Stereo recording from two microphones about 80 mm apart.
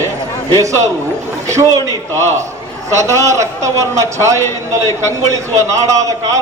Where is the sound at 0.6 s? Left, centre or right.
Right.